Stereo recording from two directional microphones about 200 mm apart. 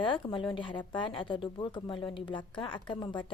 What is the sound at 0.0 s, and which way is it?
Speech, 25° left (ahead or behind).